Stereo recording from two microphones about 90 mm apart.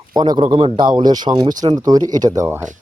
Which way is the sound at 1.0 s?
55° right (ahead or behind).